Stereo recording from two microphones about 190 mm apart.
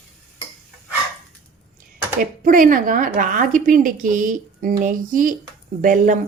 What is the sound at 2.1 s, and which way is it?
A woman's voice, 50° right (ahead or behind).